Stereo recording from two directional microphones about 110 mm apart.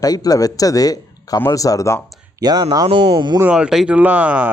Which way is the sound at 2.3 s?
40° right (ahead or behind).